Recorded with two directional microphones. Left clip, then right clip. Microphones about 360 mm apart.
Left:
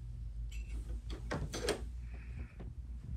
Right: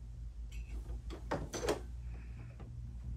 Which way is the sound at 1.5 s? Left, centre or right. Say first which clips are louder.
Even; centre.